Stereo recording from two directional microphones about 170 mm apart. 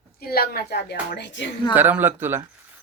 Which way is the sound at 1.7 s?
10° right (ahead or behind).